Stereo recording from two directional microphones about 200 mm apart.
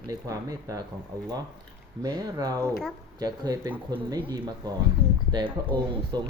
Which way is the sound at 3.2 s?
20° right (ahead or behind).